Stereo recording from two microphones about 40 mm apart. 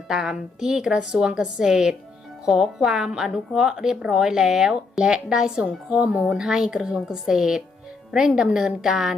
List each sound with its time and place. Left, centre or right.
0.1 s speech: centre